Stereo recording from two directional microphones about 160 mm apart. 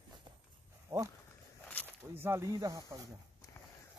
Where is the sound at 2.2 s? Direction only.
15° right (ahead or behind).